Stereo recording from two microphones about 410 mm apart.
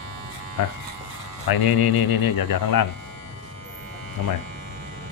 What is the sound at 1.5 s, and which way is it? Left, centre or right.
Speech, left.